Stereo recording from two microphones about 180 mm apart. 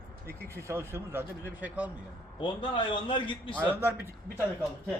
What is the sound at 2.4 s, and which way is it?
A man's voice, 25° left (ahead or behind).